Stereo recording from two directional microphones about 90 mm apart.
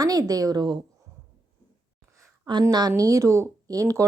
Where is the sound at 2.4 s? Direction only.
50° right (ahead or behind).